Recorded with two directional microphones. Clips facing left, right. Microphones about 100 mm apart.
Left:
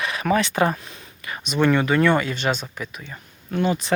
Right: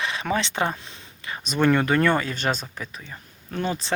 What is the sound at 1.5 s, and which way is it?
Speech, 5° left (ahead or behind).